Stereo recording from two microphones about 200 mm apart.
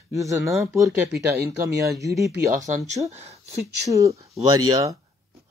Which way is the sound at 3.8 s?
15° right (ahead or behind).